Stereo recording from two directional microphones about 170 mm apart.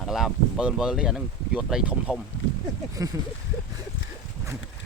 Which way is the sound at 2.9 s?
20° right (ahead or behind).